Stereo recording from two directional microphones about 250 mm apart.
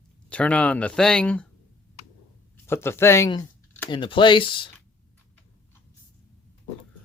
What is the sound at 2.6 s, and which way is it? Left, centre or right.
Speech, centre.